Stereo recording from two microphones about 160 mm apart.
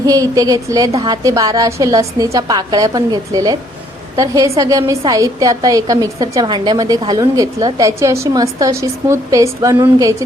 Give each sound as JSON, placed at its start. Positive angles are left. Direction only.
{"t": 0.0, "sound": "a woman's voice", "side_deg": -20}